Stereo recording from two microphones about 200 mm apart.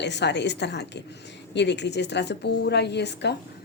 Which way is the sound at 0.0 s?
60° left (ahead or behind).